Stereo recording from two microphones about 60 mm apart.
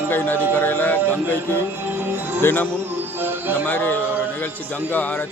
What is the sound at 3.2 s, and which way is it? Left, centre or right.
Music, right.